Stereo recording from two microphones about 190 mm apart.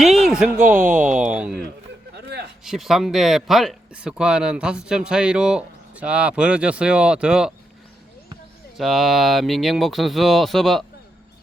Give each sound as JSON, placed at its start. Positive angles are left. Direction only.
{"t": 0.3, "sound": "speech", "side_deg": -5}
{"t": 2.1, "sound": "a sound", "side_deg": -60}
{"t": 2.6, "sound": "speech", "side_deg": 0}
{"t": 8.8, "sound": "speech", "side_deg": 0}